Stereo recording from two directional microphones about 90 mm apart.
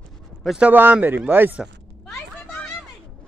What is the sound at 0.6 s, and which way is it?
Speech, 20° right (ahead or behind).